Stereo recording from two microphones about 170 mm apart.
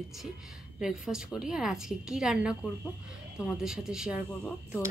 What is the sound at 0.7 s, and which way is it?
Speech, 5° right (ahead or behind).